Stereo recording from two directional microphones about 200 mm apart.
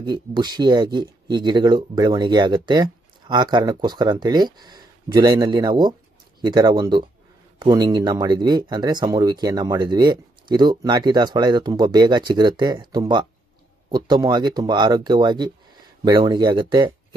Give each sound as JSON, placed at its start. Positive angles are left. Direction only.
{"t": 0.0, "sound": "speech", "side_deg": -20}